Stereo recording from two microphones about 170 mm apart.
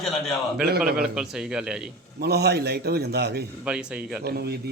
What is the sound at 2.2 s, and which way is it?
A man's voice, 70° right (ahead or behind).